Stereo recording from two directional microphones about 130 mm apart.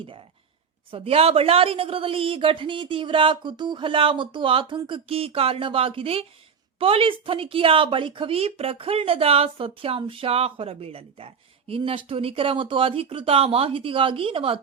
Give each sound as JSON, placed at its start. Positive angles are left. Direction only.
{"t": 0.9, "sound": "speech", "side_deg": -45}